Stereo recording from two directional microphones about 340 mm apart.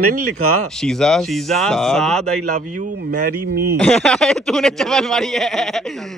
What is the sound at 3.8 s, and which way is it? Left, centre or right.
Speech, centre.